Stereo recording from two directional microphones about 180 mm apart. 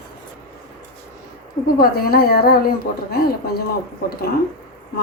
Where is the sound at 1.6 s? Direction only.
55° left (ahead or behind).